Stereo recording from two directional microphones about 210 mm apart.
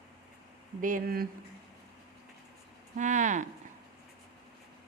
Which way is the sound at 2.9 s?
35° right (ahead or behind).